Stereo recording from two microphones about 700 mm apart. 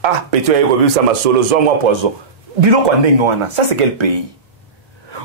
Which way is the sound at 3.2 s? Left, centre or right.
Right.